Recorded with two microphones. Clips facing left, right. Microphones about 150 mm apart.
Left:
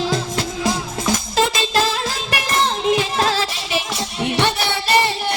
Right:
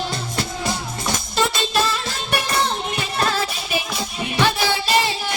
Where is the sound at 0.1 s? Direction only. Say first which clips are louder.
Left 5 dB; 90° left; by 4.4 s 70° left (ahead or behind).